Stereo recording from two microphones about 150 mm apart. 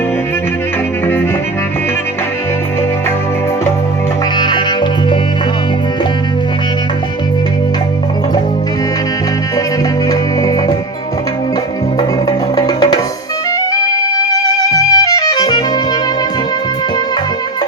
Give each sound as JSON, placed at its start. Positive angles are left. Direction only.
{"t": 4.4, "sound": "music", "side_deg": 30}
{"t": 12.5, "sound": "music", "side_deg": 25}
{"t": 14.7, "sound": "music", "side_deg": 25}